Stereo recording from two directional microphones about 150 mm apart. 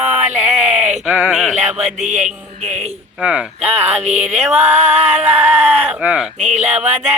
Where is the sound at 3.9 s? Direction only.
50° right (ahead or behind).